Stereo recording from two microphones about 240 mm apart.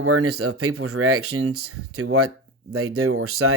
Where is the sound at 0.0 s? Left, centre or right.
Right.